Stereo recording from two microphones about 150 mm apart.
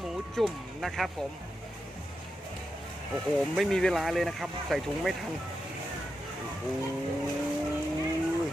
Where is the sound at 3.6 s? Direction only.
5° left (ahead or behind).